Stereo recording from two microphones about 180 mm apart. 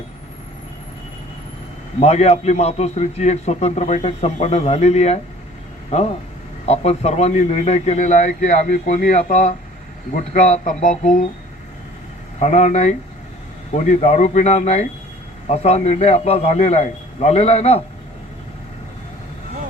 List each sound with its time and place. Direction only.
2.0 s a man's voice: 35° left (ahead or behind)
12.4 s a man's voice: 40° left (ahead or behind)